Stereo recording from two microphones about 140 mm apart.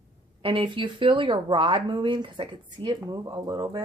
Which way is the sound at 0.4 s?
35° right (ahead or behind).